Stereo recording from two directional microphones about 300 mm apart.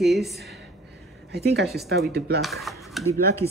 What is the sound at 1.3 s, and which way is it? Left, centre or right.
Speech, right.